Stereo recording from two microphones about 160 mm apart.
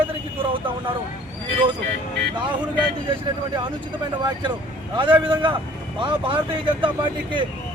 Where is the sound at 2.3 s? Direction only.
30° right (ahead or behind).